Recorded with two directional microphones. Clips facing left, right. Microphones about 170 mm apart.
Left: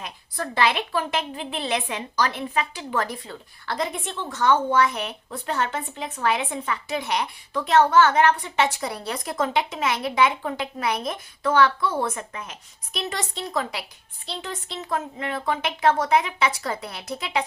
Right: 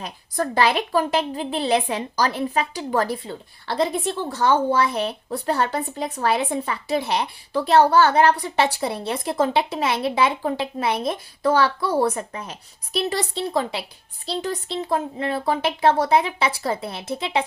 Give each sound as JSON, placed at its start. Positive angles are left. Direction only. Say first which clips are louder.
{"t": 0.0, "sound": "a woman's voice", "louder": "right 6 dB", "side_deg": -40}